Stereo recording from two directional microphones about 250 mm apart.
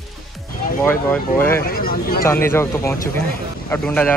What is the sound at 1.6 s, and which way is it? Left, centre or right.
Speech, left.